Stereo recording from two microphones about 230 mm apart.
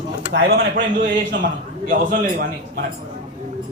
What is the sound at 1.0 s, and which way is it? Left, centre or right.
A man's voice, right.